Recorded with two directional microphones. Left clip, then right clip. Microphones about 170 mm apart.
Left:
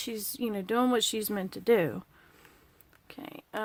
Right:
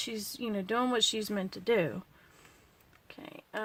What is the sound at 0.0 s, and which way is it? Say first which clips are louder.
Speech: left 2 dB; 30° left (ahead or behind).